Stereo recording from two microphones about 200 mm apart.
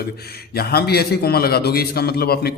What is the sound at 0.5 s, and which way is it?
A man's voice, 50° left (ahead or behind).